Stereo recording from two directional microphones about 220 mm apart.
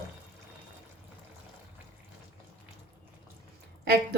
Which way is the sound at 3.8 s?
45° right (ahead or behind).